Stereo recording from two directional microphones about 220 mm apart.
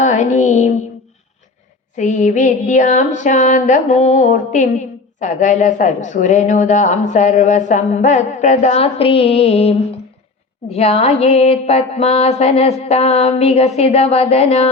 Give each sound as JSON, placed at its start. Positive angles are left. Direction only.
{"t": 0.0, "sound": "music", "side_deg": 35}
{"t": 2.0, "sound": "a woman's voice", "side_deg": 35}
{"t": 10.7, "sound": "a sound", "side_deg": 30}